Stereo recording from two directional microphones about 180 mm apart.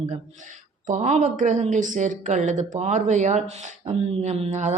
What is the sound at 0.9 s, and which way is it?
A woman's voice, 40° right (ahead or behind).